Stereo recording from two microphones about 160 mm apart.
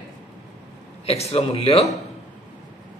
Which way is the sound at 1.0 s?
40° left (ahead or behind).